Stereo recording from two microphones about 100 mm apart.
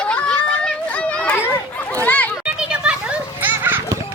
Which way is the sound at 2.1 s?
15° left (ahead or behind).